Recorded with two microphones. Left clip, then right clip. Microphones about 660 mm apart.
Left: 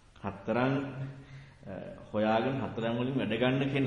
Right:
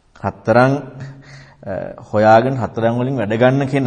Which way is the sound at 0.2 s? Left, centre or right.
Right.